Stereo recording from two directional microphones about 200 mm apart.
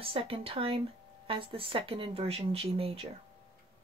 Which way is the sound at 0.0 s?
30° right (ahead or behind).